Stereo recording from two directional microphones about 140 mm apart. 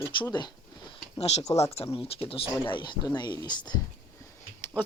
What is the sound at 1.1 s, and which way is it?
Speech, 50° left (ahead or behind).